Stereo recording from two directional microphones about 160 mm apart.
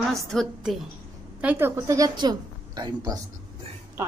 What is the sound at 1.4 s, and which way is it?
A woman's voice, 15° right (ahead or behind).